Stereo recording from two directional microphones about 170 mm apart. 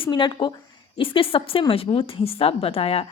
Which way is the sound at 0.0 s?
25° left (ahead or behind).